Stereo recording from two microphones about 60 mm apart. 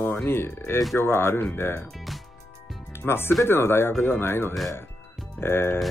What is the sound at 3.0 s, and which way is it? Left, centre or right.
Speech, left.